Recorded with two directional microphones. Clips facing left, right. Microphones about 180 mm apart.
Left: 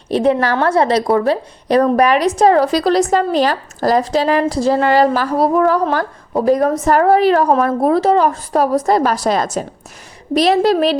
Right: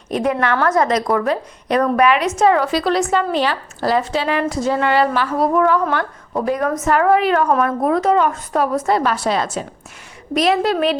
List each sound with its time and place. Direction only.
0.1 s a woman's voice: 30° left (ahead or behind)